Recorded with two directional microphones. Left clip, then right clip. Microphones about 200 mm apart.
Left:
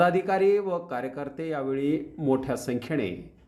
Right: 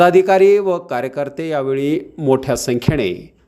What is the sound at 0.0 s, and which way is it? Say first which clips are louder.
A man's voice: right 12 dB; 40° right (ahead or behind).